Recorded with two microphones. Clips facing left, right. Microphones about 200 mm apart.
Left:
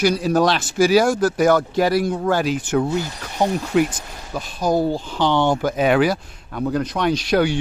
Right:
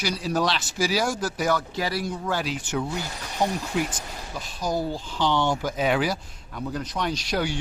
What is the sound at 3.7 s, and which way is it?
Speech, 70° left (ahead or behind).